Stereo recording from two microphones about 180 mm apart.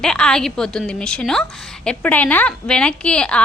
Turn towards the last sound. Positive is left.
turn(degrees=5)  # may be behind; listen again after turning